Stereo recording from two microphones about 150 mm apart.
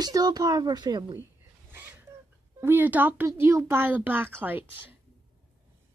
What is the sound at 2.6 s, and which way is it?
Speech, 15° right (ahead or behind).